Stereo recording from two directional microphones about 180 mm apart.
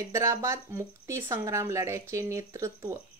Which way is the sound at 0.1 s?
15° right (ahead or behind).